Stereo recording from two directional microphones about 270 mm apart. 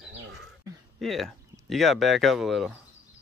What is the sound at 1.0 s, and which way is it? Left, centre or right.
Speech, centre.